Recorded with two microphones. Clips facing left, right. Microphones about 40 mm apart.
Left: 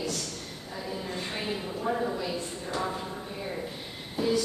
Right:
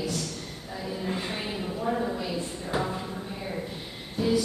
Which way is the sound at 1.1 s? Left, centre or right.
Centre.